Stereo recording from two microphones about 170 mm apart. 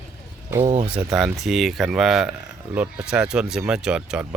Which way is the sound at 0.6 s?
40° right (ahead or behind).